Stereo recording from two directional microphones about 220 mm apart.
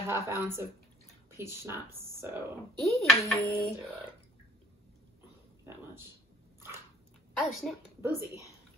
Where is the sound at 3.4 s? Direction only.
40° left (ahead or behind).